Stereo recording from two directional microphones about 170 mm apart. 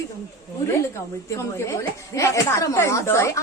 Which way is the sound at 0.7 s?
15° left (ahead or behind).